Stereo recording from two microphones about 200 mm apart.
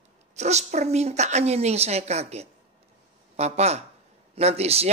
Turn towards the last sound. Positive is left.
turn(degrees=-30)  # may be behind; listen again after turning